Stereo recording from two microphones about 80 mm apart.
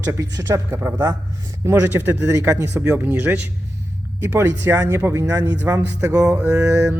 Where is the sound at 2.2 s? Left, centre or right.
Right.